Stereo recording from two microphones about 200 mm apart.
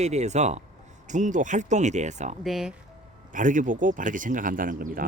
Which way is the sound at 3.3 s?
40° right (ahead or behind).